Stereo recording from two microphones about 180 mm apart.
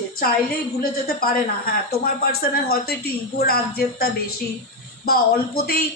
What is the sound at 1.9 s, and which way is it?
A woman's voice, 60° left (ahead or behind).